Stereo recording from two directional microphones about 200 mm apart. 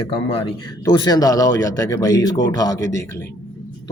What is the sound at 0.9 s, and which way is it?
Speech, 20° left (ahead or behind).